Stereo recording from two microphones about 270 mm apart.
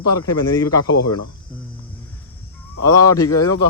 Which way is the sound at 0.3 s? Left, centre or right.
Centre.